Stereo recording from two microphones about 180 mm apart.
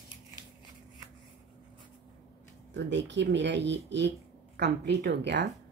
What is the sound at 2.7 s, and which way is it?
Speech, 80° right.